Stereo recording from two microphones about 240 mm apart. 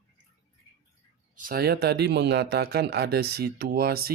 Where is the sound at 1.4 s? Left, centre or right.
Right.